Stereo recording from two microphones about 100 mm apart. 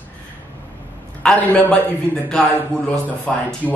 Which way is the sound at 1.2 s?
10° left (ahead or behind).